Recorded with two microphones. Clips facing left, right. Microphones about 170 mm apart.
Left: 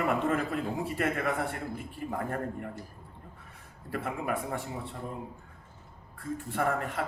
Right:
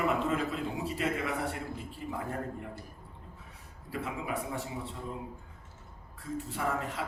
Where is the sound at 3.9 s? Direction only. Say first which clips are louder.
Left 3 dB; 55° left (ahead or behind).